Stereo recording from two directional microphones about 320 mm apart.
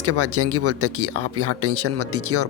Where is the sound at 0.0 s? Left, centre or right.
Right.